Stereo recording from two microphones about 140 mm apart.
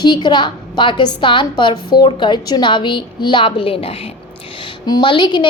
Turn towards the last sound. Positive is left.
turn(degrees=35)  # may be behind; listen again after turning